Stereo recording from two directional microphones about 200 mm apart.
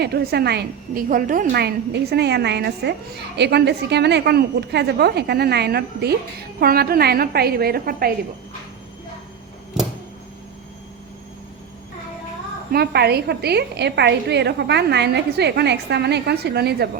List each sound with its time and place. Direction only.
0.0 s a woman's voice: 55° right (ahead or behind)
12.7 s a woman's voice: 55° right (ahead or behind)